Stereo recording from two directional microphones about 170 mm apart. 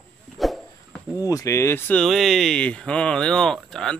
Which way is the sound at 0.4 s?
Centre (ahead or behind).